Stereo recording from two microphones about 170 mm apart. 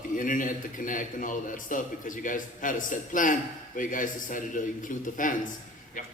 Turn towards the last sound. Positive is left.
turn(degrees=50)  # may be behind; listen again after turning